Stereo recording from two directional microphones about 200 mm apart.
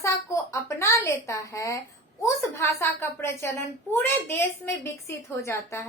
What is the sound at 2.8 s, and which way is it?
A woman's voice, 10° left (ahead or behind).